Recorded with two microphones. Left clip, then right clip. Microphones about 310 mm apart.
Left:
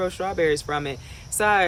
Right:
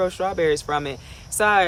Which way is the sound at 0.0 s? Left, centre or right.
Centre.